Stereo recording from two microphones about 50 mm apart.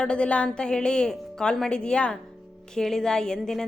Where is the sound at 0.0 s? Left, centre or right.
Centre.